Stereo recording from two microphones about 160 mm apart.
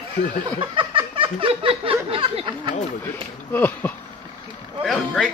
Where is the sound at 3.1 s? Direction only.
10° left (ahead or behind).